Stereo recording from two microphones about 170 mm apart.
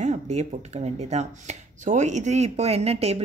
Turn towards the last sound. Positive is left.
turn(degrees=-35)  # may be behind; listen again after turning